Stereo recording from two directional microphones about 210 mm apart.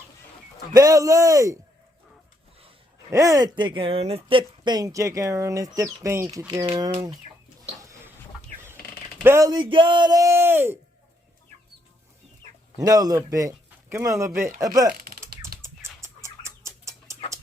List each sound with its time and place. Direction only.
0.7 s speech: 15° right (ahead or behind)
3.1 s speech: 15° right (ahead or behind)
7.8 s a sound: 15° right (ahead or behind)
9.2 s speech: 15° right (ahead or behind)
12.8 s speech: 15° right (ahead or behind)
14.9 s typing: 45° right (ahead or behind)
16.0 s bird: 15° right (ahead or behind)